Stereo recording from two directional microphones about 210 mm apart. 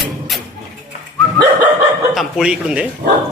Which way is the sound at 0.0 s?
Centre (ahead or behind).